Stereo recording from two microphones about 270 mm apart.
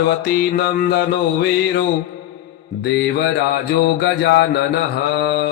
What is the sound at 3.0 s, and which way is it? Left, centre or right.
Mantra, left.